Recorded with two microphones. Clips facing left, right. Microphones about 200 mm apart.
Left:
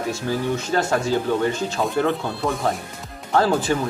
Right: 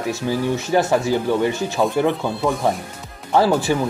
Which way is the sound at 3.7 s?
15° right (ahead or behind).